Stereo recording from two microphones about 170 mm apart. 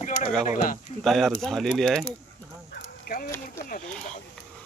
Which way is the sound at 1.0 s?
Centre (ahead or behind).